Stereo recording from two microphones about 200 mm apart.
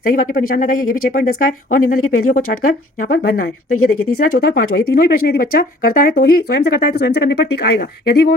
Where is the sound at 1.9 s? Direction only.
90° left.